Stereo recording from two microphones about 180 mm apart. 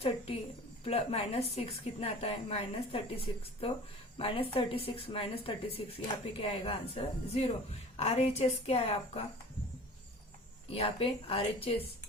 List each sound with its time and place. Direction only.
0.9 s a woman's voice: 35° left (ahead or behind)
10.7 s a woman's voice: 30° left (ahead or behind)